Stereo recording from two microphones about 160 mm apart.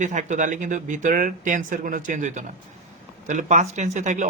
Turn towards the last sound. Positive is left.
turn(degrees=-50)  # may be behind; listen again after turning